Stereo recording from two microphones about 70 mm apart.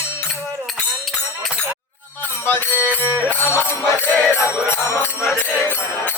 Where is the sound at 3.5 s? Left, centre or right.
Right.